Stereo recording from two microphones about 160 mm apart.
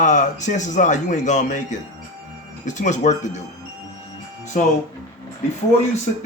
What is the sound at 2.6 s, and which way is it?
Speech, 50° left (ahead or behind).